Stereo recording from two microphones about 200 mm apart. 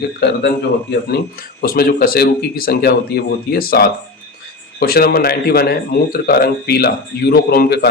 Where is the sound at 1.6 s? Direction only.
50° left (ahead or behind).